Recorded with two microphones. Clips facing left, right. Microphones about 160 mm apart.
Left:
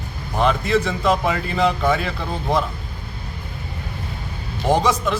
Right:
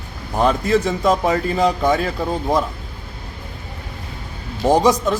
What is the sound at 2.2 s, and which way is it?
Speech, 10° right (ahead or behind).